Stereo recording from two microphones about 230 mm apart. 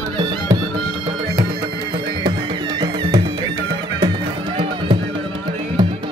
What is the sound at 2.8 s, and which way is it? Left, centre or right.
Music, centre.